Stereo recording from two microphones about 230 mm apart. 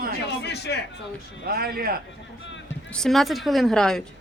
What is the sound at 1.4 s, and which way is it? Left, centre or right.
Speech, right.